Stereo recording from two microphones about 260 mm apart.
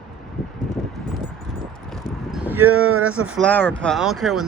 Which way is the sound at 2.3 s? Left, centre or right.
Centre.